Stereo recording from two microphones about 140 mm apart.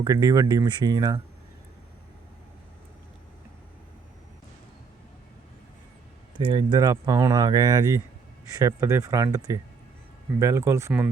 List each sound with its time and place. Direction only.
0.0 s speech: 25° right (ahead or behind)
6.5 s speech: 30° right (ahead or behind)